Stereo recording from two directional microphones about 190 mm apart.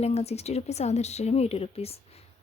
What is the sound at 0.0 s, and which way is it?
Speech, 35° left (ahead or behind).